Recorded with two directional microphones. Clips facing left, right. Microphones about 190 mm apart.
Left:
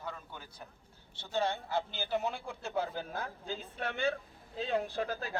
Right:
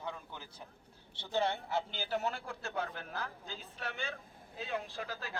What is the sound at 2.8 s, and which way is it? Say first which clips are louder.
Speech: left 4 dB; 30° left (ahead or behind).